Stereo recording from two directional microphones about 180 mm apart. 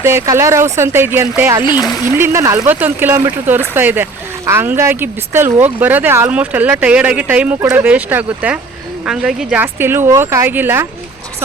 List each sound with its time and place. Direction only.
0.0 s speech: 15° right (ahead or behind)